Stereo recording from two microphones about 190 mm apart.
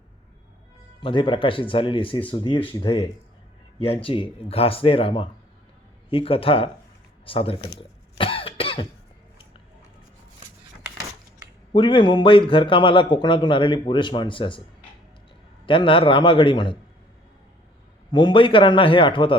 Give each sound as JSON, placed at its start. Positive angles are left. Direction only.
{"t": 1.0, "sound": "a man's voice", "side_deg": 25}
{"t": 7.8, "sound": "cough", "side_deg": 30}
{"t": 11.7, "sound": "a man's voice", "side_deg": 25}
{"t": 15.6, "sound": "a man's voice", "side_deg": 25}
{"t": 18.1, "sound": "a man's voice", "side_deg": 25}